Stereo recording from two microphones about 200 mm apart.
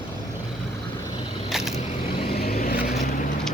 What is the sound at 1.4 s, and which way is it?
Vehicle, centre (ahead or behind).